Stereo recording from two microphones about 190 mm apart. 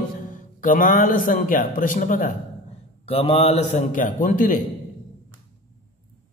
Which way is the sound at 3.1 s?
30° left (ahead or behind).